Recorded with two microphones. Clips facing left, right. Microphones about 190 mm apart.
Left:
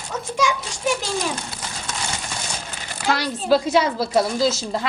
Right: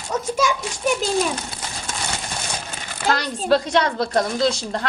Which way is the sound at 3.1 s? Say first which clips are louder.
Even; 5° left (ahead or behind).